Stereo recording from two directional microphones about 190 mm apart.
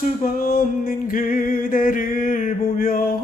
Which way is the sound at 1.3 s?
45° left (ahead or behind).